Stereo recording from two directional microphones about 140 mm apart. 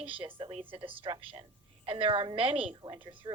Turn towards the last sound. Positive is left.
turn(degrees=-35)  # may be behind; listen again after turning